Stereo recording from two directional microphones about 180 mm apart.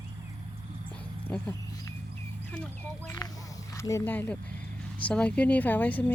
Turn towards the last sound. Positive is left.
turn(degrees=10)  # may be behind; listen again after turning